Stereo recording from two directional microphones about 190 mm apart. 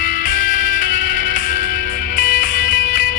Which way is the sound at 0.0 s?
45° left (ahead or behind).